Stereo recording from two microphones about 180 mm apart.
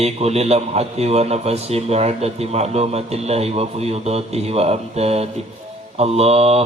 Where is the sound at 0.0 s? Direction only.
35° right (ahead or behind).